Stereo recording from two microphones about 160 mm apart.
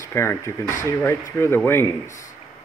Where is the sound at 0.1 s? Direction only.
15° left (ahead or behind).